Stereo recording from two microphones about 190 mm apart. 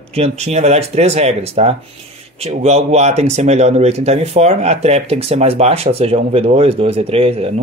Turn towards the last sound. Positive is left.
turn(degrees=-30)  # may be behind; listen again after turning